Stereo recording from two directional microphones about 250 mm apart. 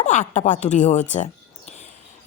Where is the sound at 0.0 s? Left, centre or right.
Left.